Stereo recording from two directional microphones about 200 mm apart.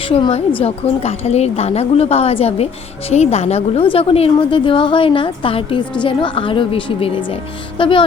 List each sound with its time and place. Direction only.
0.1 s a woman's voice: 30° left (ahead or behind)